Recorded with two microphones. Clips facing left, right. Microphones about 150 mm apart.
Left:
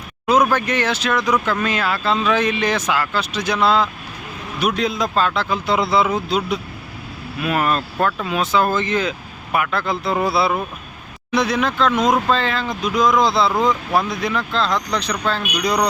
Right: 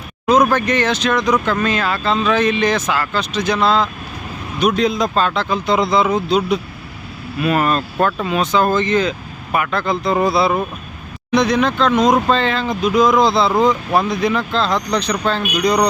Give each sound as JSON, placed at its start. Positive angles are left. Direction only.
{"t": 0.3, "sound": "speech", "side_deg": 10}